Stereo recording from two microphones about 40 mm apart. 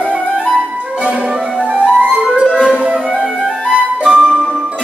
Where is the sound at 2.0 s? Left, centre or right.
Right.